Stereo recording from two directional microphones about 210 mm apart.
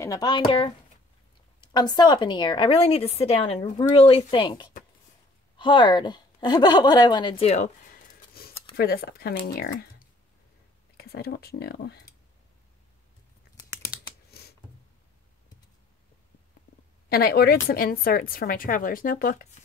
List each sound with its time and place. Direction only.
0.0 s a woman's voice: 15° left (ahead or behind); by 12.0 s 50° left (ahead or behind)
14.3 s a sound: 50° left (ahead or behind)
17.1 s speech: 45° left (ahead or behind)